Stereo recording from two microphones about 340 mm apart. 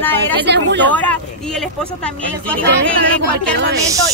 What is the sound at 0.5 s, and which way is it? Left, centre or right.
Speech, right.